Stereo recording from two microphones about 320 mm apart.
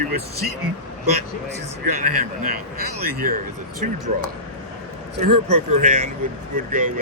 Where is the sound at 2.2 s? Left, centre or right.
Right.